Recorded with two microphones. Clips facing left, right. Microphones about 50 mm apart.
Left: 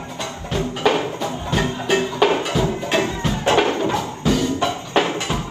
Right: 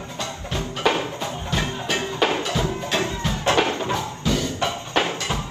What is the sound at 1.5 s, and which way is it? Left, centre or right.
Music, left.